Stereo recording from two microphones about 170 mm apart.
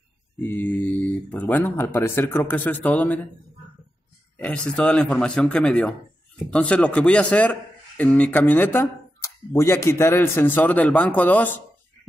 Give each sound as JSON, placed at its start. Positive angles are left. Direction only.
{"t": 0.4, "sound": "speech", "side_deg": 10}
{"t": 4.4, "sound": "speech", "side_deg": 5}